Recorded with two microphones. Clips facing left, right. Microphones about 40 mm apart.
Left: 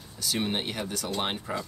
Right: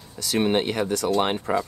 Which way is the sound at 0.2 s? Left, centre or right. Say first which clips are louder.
Right 8 dB; right.